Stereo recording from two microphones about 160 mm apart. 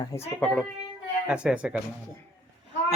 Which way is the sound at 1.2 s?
5° right (ahead or behind).